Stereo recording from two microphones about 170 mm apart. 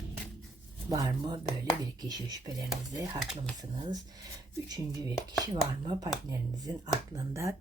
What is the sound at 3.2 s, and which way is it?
Speech, 5° right (ahead or behind).